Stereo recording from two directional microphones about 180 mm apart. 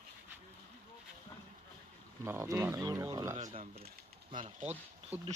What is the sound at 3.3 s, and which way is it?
Speech, 40° right (ahead or behind).